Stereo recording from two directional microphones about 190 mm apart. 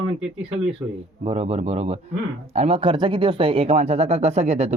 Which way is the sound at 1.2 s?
35° right (ahead or behind).